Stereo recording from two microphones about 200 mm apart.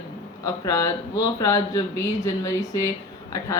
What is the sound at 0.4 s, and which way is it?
Mantra, 15° left (ahead or behind).